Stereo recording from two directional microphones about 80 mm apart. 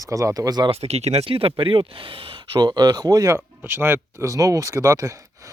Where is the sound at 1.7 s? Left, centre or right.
Right.